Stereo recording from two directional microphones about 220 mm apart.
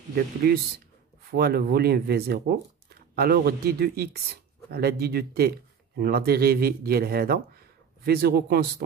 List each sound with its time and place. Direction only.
0.1 s speech: 45° right (ahead or behind)